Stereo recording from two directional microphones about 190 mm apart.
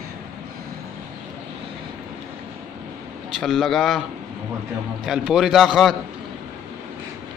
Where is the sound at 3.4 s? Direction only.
Centre (ahead or behind).